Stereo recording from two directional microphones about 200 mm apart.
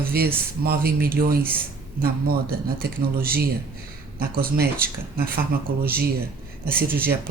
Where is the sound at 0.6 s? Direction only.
50° right (ahead or behind).